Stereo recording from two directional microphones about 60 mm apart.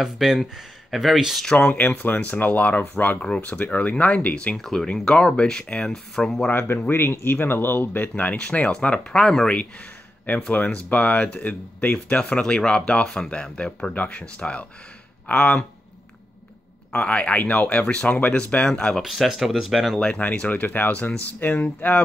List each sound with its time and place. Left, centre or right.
0.0 s speech: centre
1.4 s speech: centre
4.6 s speech: centre
6.9 s speech: left; by 9.6 s centre
10.5 s speech: left
16.9 s speech: left
18.9 s speech: centre
20.2 s speech: left